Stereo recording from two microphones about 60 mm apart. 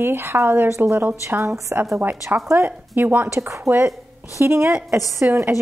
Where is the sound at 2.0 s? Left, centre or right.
Right.